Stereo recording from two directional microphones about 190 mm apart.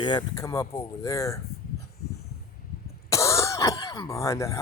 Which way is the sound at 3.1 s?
15° left (ahead or behind).